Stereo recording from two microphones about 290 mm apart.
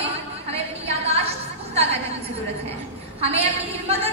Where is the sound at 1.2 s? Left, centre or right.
Right.